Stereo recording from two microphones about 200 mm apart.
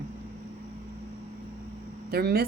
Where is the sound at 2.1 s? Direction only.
50° right (ahead or behind).